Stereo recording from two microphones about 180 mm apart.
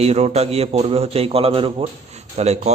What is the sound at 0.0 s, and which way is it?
A man's voice, 35° right (ahead or behind).